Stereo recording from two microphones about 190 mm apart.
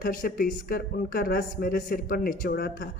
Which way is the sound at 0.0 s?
45° left (ahead or behind).